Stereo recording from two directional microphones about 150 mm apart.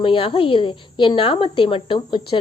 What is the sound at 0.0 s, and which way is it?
A woman's voice, 35° left (ahead or behind).